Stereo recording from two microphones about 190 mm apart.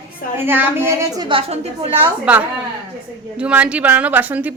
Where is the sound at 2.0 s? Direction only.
5° right (ahead or behind).